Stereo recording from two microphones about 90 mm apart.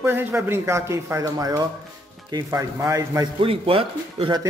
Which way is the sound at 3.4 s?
90° right.